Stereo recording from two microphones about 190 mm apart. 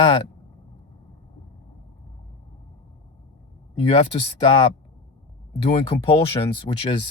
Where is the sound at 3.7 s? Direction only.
30° left (ahead or behind).